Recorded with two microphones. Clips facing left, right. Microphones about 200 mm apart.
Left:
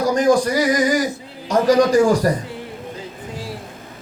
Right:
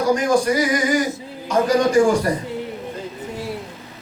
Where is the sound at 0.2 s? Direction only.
35° left (ahead or behind).